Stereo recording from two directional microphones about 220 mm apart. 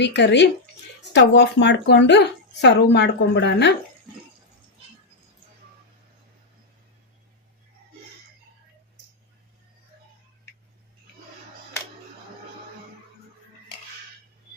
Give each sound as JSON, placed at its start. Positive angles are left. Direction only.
{"t": 0.0, "sound": "a woman's voice", "side_deg": 50}